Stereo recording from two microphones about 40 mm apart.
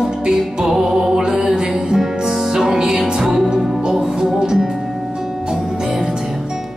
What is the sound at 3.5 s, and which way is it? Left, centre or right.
Music, right.